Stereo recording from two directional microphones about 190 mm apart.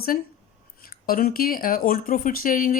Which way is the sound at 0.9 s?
50° left (ahead or behind).